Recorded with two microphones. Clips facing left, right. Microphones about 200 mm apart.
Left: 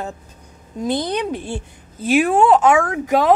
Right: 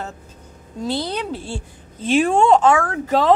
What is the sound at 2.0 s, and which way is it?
Speech, 5° left (ahead or behind).